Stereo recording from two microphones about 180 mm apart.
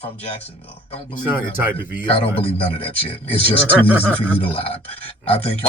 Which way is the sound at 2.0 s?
30° left (ahead or behind).